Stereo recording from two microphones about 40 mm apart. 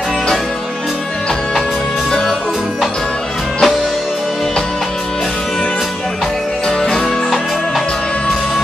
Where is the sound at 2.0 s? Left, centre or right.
Centre.